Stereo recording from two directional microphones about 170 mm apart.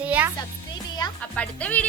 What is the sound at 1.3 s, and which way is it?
Speech, 10° left (ahead or behind).